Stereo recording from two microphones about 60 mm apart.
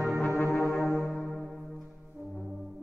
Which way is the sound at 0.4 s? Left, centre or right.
Left.